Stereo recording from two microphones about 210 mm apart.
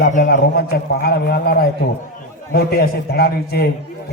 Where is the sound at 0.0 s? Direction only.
40° left (ahead or behind).